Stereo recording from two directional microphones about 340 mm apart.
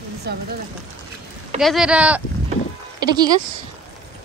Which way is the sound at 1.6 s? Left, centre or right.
Centre.